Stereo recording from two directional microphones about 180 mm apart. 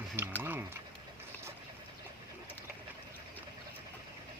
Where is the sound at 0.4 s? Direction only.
10° right (ahead or behind).